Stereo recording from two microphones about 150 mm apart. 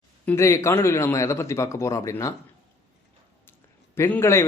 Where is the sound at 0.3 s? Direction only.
20° left (ahead or behind).